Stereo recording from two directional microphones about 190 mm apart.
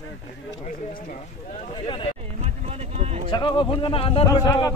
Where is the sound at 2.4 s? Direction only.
35° right (ahead or behind).